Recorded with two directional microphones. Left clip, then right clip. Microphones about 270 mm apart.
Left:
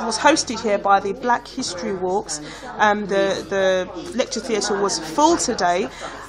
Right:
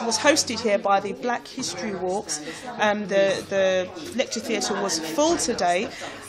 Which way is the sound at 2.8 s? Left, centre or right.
Centre.